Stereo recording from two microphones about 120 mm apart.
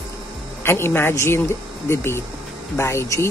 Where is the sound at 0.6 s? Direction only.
20° left (ahead or behind).